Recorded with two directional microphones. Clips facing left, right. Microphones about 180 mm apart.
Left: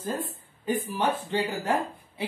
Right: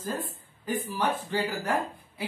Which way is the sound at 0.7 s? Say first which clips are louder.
Left 2 dB; 25° left (ahead or behind).